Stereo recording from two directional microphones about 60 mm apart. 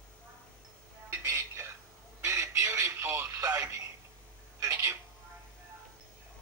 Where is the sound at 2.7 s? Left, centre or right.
Right.